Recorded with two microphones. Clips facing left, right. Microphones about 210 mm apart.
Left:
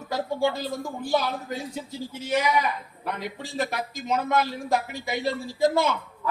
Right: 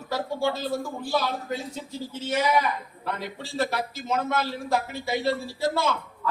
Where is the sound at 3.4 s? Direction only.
15° left (ahead or behind).